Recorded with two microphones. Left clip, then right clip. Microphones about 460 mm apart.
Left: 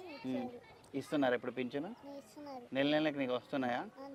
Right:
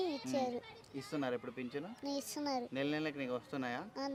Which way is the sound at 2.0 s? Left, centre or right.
Right.